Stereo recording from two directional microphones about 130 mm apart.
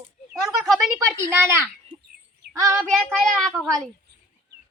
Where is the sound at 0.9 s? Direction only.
25° right (ahead or behind).